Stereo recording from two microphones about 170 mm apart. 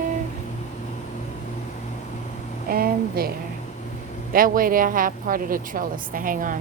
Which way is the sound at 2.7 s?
60° right (ahead or behind).